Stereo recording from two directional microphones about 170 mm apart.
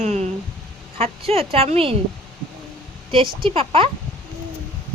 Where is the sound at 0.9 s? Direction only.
35° right (ahead or behind).